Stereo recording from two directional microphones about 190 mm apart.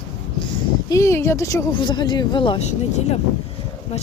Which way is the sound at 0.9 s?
15° left (ahead or behind).